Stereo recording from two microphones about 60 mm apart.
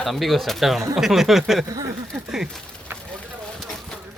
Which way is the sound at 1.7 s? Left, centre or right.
Right.